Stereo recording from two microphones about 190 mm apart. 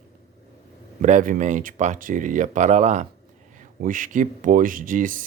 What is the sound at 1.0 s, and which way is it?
Speech, 40° right (ahead or behind).